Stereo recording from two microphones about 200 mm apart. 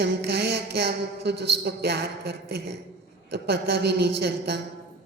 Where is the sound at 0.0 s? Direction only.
55° right (ahead or behind).